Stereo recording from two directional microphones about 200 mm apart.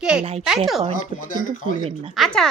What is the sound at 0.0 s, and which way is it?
Speech, 5° right (ahead or behind).